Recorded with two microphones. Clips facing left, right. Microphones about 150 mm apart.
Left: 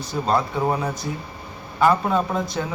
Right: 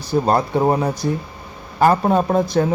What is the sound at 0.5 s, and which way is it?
Speech, 35° right (ahead or behind).